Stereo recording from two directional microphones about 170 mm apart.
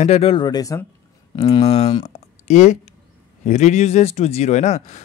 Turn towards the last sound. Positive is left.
turn(degrees=40)  # may be behind; listen again after turning